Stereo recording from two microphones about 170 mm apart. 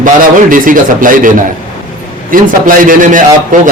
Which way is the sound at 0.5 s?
55° right (ahead or behind).